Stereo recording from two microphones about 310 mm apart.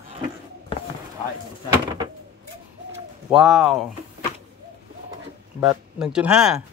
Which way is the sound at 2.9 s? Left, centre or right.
Centre.